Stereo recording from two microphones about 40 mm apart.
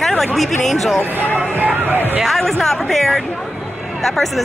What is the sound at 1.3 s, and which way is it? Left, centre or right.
Speech, right.